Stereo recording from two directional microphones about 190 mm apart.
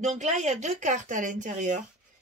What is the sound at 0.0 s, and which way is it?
Speech, 40° right (ahead or behind).